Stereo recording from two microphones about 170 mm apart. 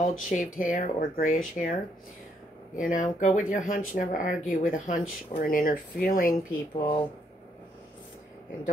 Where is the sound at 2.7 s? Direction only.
50° left (ahead or behind).